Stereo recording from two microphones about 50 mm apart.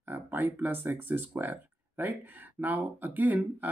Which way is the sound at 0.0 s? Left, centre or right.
Right.